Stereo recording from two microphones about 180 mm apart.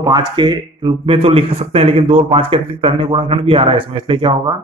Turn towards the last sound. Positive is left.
turn(degrees=-25)  # may be behind; listen again after turning